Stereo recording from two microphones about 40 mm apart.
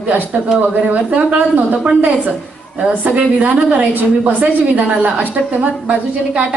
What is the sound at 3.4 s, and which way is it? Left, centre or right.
A woman's voice, right.